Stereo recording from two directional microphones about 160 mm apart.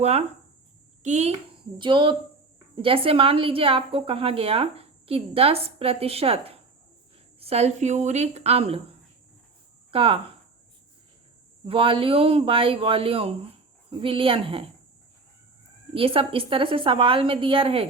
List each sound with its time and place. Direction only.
0.0 s speech: 40° right (ahead or behind)
1.8 s a woman's voice: 30° right (ahead or behind)
9.9 s speech: 35° right (ahead or behind)
11.6 s a woman's voice: 35° right (ahead or behind)
16.0 s a woman's voice: 35° right (ahead or behind)